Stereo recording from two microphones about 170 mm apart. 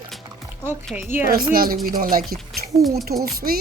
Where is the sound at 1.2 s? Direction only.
60° right (ahead or behind).